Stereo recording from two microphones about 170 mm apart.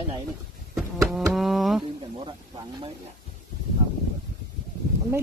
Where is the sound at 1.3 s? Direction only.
Centre (ahead or behind).